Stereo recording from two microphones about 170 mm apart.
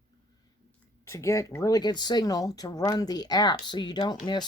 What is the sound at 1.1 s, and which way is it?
Speech, 15° left (ahead or behind).